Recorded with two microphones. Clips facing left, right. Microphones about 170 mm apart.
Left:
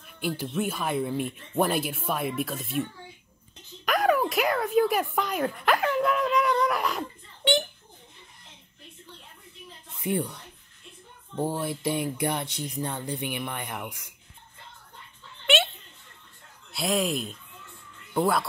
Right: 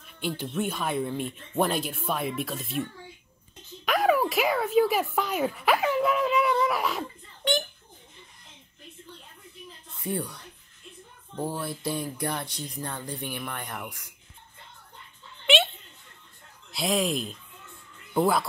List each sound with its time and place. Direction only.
0.0 s speech: 5° left (ahead or behind)
10.0 s speech: 20° left (ahead or behind)
11.3 s speech: 20° left (ahead or behind); by 13.9 s 5° left (ahead or behind)
15.4 s a sound: centre (ahead or behind)
16.7 s speech: centre (ahead or behind)